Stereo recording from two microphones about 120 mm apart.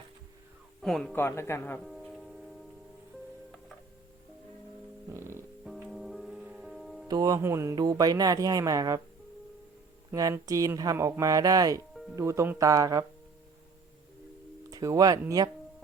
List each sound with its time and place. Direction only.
0.8 s speech: 5° left (ahead or behind)
1.1 s speech: 20° left (ahead or behind)
1.8 s music: centre (ahead or behind)
5.1 s music: 25° right (ahead or behind)
5.6 s music: centre (ahead or behind)
7.1 s speech: 30° right (ahead or behind)
10.1 s speech: 25° right (ahead or behind)
14.7 s speech: 30° right (ahead or behind)